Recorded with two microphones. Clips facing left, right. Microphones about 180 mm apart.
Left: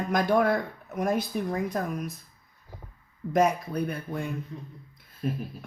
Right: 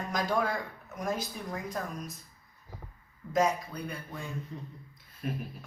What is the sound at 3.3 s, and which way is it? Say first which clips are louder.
Speech: left 4 dB; 60° left (ahead or behind).